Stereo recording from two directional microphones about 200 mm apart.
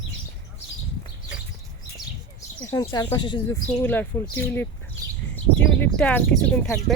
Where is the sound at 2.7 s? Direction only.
20° left (ahead or behind).